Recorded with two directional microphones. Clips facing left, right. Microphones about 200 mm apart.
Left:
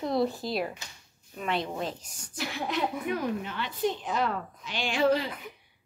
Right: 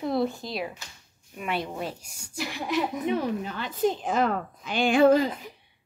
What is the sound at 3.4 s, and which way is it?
A woman's voice, 40° right (ahead or behind).